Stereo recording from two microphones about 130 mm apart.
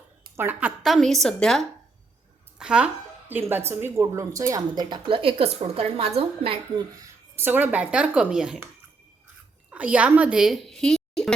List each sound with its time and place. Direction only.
0.3 s a woman's voice: 15° right (ahead or behind)
0.8 s a woman's voice: centre (ahead or behind)
2.6 s a woman's voice: 5° right (ahead or behind); by 6.8 s 45° right (ahead or behind)
7.3 s a woman's voice: 15° right (ahead or behind)
9.6 s a woman's voice: 10° right (ahead or behind)